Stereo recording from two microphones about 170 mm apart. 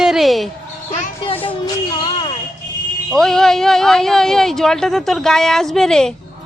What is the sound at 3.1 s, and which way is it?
A woman's voice, centre (ahead or behind).